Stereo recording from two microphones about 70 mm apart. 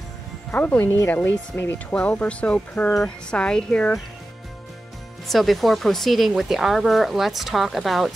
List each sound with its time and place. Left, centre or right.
0.5 s speech: left
0.7 s speech: left
1.0 s speech: left
2.0 s speech: centre
2.9 s speech: centre
5.3 s speech: centre